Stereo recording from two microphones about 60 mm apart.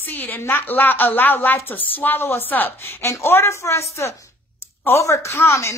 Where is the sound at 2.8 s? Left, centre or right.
Left.